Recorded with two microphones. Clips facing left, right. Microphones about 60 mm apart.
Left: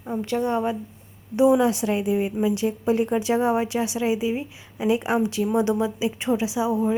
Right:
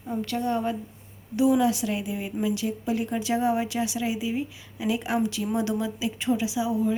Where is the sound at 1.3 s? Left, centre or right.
Left.